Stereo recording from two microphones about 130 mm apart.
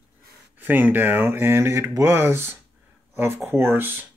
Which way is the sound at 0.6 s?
15° right (ahead or behind).